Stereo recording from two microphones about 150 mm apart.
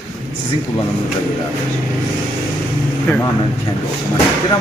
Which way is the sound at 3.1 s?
15° left (ahead or behind).